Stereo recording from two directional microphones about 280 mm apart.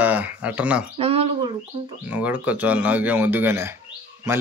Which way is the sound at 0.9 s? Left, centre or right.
Right.